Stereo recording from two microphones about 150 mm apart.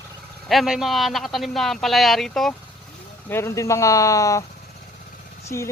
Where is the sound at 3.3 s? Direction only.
15° left (ahead or behind).